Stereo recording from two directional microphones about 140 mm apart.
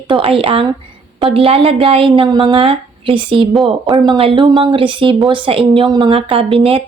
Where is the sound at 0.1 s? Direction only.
40° right (ahead or behind).